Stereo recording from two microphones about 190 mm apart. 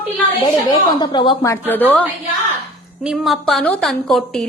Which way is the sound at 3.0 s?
Centre (ahead or behind).